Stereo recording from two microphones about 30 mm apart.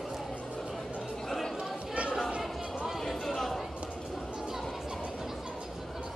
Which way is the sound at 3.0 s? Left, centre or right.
Centre.